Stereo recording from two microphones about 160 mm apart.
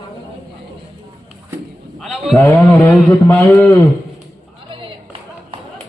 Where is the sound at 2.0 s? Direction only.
Centre (ahead or behind).